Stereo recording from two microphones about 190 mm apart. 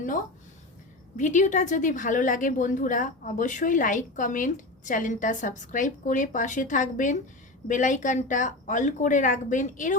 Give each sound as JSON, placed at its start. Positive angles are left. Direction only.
{"t": 1.1, "sound": "a woman's voice", "side_deg": 40}